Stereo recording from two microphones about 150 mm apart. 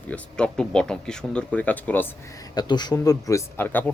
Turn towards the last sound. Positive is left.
turn(degrees=10)  # may be behind; listen again after turning